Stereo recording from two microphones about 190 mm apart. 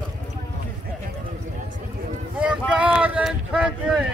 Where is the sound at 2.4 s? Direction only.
5° right (ahead or behind).